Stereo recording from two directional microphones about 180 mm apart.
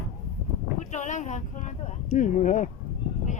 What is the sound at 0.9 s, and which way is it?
Speech, 40° left (ahead or behind).